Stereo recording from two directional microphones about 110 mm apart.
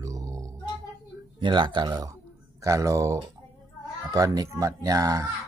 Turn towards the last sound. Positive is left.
turn(degrees=-30)  # may be behind; listen again after turning